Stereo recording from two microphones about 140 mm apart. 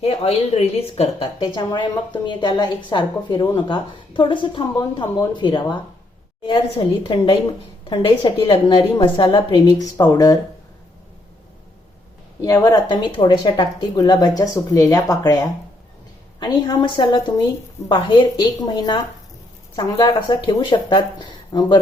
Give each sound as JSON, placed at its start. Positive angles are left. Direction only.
{"t": 0.0, "sound": "a woman's voice", "side_deg": 45}
{"t": 12.4, "sound": "a woman's voice", "side_deg": 25}